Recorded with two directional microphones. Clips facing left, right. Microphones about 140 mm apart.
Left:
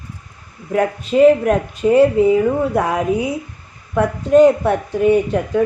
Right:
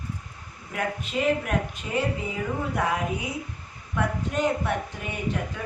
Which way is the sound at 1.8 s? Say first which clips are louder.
Left 17 dB; 50° left (ahead or behind).